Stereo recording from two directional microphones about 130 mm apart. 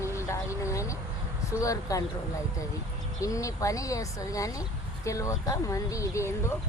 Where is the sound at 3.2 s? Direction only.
25° left (ahead or behind).